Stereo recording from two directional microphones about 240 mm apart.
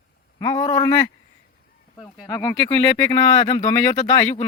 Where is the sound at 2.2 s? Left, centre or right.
Centre.